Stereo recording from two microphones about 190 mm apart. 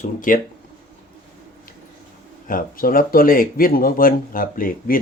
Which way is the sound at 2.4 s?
50° left (ahead or behind).